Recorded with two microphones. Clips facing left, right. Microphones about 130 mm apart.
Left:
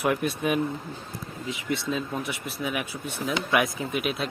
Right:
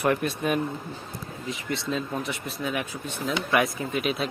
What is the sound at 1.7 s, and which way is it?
Speech, 5° left (ahead or behind).